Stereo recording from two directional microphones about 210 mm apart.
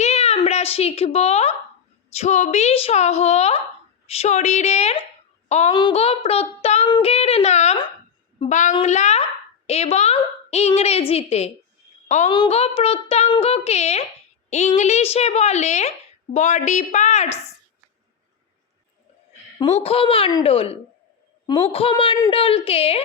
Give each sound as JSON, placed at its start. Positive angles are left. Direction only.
{"t": 0.0, "sound": "a sound", "side_deg": 30}
{"t": 2.1, "sound": "a woman's voice", "side_deg": 35}
{"t": 5.5, "sound": "child singing", "side_deg": 30}
{"t": 8.4, "sound": "a woman's voice", "side_deg": 35}
{"t": 19.5, "sound": "a child's voice", "side_deg": 30}